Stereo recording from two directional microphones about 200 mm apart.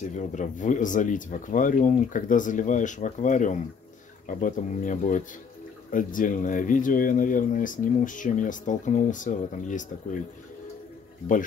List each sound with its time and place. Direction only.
0.1 s speech: 40° left (ahead or behind)